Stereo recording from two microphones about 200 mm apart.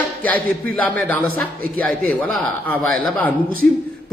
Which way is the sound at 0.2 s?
10° left (ahead or behind).